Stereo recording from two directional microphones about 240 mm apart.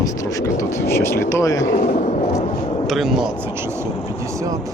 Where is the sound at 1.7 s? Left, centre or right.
Left.